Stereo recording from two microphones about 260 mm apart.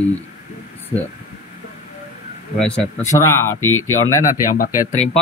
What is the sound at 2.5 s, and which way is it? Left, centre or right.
A man's voice, centre.